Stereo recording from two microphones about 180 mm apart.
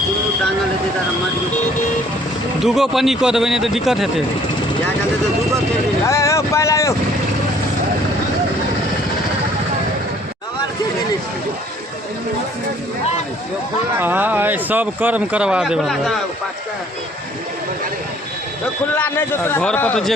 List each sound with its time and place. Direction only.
2.6 s speech: centre (ahead or behind)
6.1 s vehicle: 15° left (ahead or behind)
14.0 s speech: 10° right (ahead or behind)
18.9 s speech: 10° left (ahead or behind)